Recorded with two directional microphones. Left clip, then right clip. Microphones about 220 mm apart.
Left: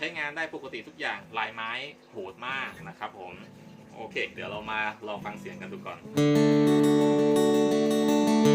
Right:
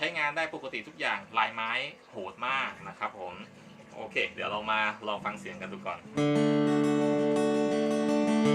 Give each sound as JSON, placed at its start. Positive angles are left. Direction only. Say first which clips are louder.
{"t": 0.0, "sound": "speech", "louder": "right 2 dB", "side_deg": 5}
{"t": 4.1, "sound": "speech", "louder": "right 2 dB", "side_deg": 5}
{"t": 6.1, "sound": "music", "louder": "left 4 dB", "side_deg": 45}